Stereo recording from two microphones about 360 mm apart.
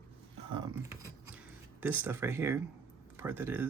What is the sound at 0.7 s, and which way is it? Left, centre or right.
Speech, centre.